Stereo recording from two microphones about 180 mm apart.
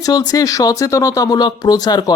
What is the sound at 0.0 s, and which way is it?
Speech, 20° left (ahead or behind).